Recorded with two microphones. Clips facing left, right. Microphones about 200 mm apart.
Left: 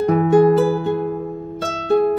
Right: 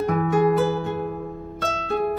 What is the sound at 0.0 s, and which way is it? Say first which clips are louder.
Music: left 7 dB; 30° left (ahead or behind).